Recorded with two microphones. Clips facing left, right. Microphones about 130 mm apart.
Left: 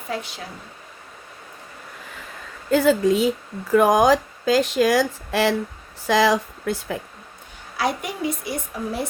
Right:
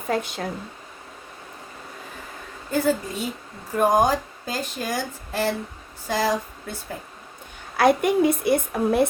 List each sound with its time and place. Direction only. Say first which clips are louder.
0.1 s speech: right 4 dB; 50° right (ahead or behind)
2.6 s speech: left 6 dB; 90° left
7.8 s a woman's voice: right 7 dB; 55° right (ahead or behind)